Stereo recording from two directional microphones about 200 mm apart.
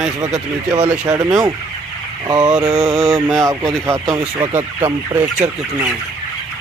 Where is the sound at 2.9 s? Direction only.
20° right (ahead or behind).